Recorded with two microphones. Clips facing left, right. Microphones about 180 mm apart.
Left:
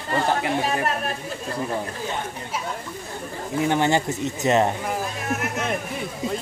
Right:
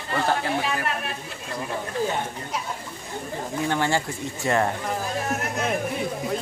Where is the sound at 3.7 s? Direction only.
20° left (ahead or behind).